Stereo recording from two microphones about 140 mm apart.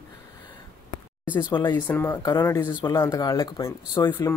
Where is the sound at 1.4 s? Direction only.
35° left (ahead or behind).